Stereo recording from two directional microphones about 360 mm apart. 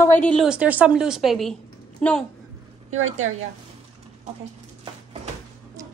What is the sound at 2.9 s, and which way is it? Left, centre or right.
Speech, right.